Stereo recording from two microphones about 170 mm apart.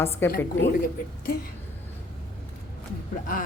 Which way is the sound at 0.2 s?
10° left (ahead or behind).